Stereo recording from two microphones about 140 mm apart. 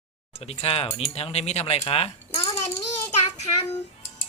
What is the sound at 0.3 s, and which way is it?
A child's voice, 50° left (ahead or behind).